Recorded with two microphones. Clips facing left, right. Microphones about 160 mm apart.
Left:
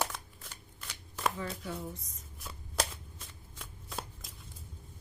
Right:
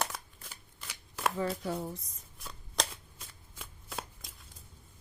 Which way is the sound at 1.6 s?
35° right (ahead or behind).